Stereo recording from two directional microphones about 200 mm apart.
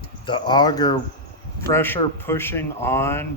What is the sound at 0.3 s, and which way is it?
Speech, 25° left (ahead or behind).